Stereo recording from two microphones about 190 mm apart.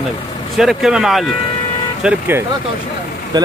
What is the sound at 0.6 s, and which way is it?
Speech, centre (ahead or behind).